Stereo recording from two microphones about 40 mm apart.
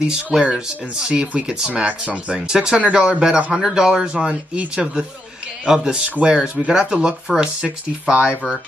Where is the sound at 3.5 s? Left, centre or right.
Centre.